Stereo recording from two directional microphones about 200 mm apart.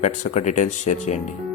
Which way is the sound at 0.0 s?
35° left (ahead or behind).